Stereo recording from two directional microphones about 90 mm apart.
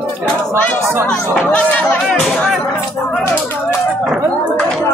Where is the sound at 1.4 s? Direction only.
15° left (ahead or behind).